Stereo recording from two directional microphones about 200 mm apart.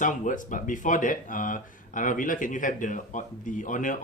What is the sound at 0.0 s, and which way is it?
Speech, 40° left (ahead or behind).